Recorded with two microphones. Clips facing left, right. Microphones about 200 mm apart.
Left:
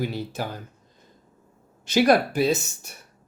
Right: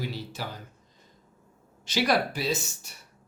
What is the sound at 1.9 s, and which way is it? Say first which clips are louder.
Speech: left 7 dB; 50° left (ahead or behind).